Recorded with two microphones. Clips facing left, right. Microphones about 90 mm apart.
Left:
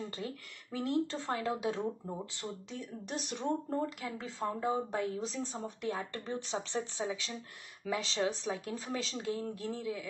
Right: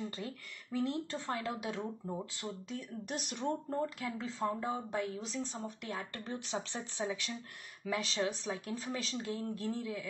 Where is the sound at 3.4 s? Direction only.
20° left (ahead or behind).